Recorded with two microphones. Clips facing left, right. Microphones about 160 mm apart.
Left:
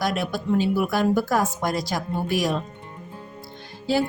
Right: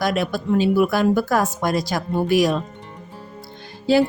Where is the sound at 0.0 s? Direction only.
90° right.